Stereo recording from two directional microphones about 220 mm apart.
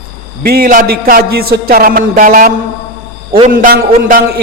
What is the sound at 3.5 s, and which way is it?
Speech, 40° right (ahead or behind).